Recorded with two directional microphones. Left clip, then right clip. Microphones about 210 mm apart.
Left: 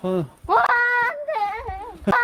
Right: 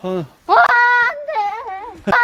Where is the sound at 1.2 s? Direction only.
25° right (ahead or behind).